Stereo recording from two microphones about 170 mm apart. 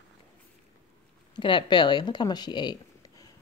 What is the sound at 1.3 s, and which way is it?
Speech, 30° left (ahead or behind).